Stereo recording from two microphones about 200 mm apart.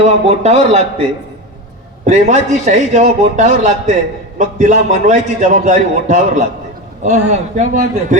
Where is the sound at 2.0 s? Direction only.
35° right (ahead or behind).